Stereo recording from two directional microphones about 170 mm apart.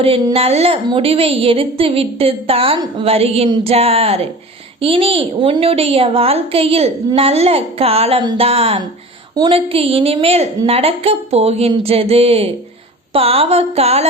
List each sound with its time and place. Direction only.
0.0 s a woman's voice: 30° right (ahead or behind)